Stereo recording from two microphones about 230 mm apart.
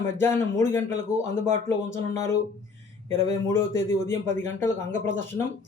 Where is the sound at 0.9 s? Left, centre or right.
Right.